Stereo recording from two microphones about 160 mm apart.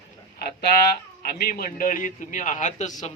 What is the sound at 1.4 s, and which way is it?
A man's voice, 65° left (ahead or behind).